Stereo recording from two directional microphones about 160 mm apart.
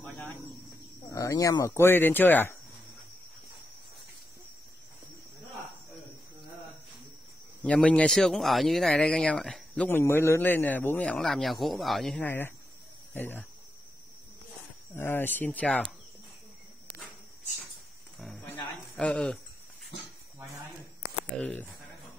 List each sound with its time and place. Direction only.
1.1 s speech: 20° left (ahead or behind)
7.6 s speech: 5° left (ahead or behind)
15.0 s speech: 15° left (ahead or behind)
18.2 s a sound: 5° left (ahead or behind)
21.4 s speech: 10° left (ahead or behind)